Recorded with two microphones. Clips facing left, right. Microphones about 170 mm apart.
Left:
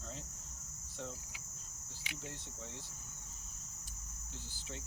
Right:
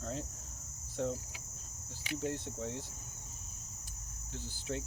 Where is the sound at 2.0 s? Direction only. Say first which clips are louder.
Right 12 dB; 45° right (ahead or behind).